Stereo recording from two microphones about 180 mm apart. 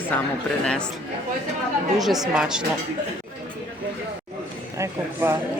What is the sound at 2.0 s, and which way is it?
Speech, centre (ahead or behind).